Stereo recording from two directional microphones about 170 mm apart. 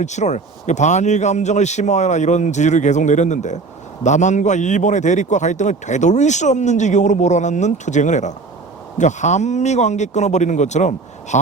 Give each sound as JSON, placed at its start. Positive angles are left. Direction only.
{"t": 0.0, "sound": "a man's voice", "side_deg": 45}